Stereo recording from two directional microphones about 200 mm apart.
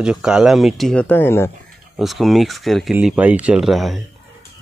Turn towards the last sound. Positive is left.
turn(degrees=0)  # may be behind; listen again after turning